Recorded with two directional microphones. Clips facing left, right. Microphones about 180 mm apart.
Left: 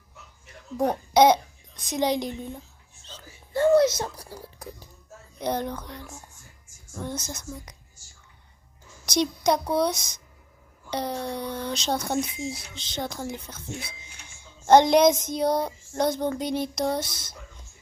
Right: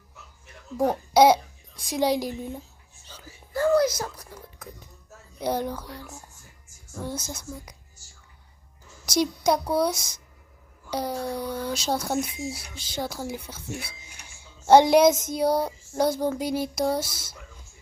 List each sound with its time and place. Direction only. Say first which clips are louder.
0.8 s a child's voice: right 1 dB; 5° right (ahead or behind)
3.0 s a sound: left 2 dB; 10° right (ahead or behind)
3.5 s speech: left 2 dB; 25° left (ahead or behind)
5.4 s speech: right 1 dB; 10° right (ahead or behind)
9.0 s speech: even; 5° right (ahead or behind)